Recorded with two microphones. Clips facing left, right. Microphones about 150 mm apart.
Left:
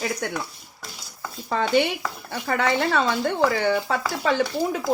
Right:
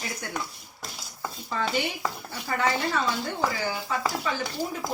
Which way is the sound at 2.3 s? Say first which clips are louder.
Left 5 dB; 65° left (ahead or behind).